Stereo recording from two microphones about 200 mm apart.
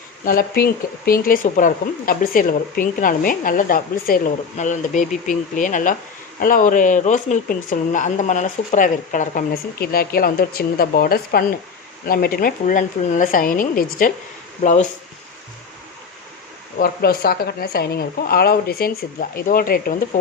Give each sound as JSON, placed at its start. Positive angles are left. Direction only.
{"t": 0.3, "sound": "speech", "side_deg": 45}
{"t": 16.7, "sound": "speech", "side_deg": 45}